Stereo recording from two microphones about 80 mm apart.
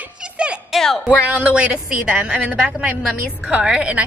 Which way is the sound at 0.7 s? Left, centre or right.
Centre.